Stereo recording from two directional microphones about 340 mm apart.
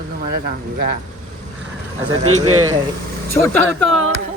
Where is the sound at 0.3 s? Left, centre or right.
Right.